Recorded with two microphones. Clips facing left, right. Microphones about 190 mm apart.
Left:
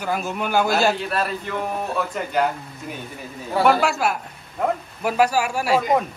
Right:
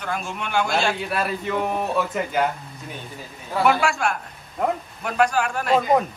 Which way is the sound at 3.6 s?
Centre (ahead or behind).